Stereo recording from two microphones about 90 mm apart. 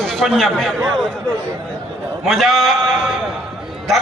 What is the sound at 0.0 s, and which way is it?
A man's voice, 5° left (ahead or behind).